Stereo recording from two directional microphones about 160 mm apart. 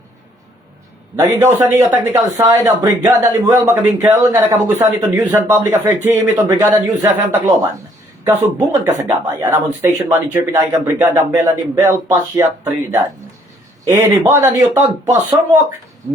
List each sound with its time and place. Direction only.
1.1 s a man's voice: 15° right (ahead or behind)